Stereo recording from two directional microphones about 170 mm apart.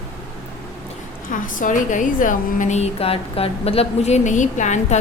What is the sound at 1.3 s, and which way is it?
A woman's voice, 50° left (ahead or behind).